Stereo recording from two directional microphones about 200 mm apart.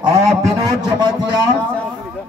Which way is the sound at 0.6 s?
20° right (ahead or behind).